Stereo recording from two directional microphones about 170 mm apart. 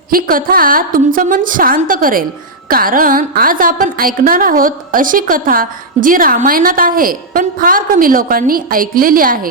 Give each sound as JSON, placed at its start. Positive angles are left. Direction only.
{"t": 0.1, "sound": "a woman's voice", "side_deg": -60}